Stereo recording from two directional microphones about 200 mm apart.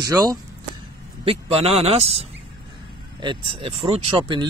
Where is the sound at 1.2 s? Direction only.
30° right (ahead or behind).